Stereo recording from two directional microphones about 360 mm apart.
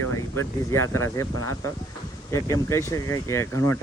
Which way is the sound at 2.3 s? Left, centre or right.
Centre.